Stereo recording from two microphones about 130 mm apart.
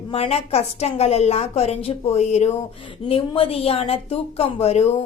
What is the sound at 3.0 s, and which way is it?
A woman's voice, 45° left (ahead or behind).